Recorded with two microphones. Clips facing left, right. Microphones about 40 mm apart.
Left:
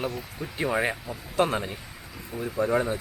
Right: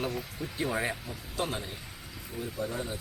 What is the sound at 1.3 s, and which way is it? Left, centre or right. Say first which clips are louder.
Speech: left 9 dB; left.